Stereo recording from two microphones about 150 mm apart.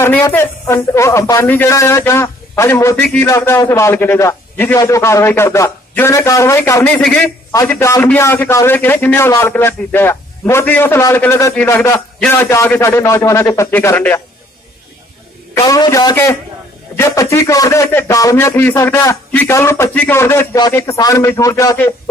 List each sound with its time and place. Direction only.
0.0 s a man's voice: 15° left (ahead or behind)
7.8 s a man's voice: 15° left (ahead or behind)
15.5 s a man's voice: 25° left (ahead or behind)